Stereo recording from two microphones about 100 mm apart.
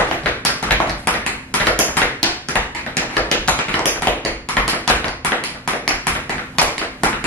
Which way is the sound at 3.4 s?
15° left (ahead or behind).